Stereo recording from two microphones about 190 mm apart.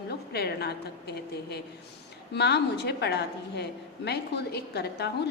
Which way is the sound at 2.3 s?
60° left (ahead or behind).